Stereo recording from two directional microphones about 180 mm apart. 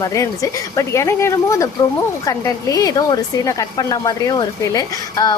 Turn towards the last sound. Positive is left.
turn(degrees=20)  # may be behind; listen again after turning